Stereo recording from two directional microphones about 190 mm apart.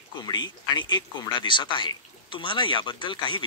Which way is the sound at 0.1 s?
20° left (ahead or behind).